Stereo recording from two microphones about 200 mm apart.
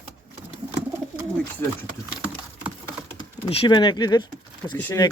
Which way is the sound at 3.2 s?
25° left (ahead or behind).